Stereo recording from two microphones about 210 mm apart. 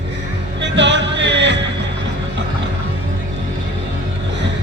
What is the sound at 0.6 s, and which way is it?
Music, 55° right (ahead or behind).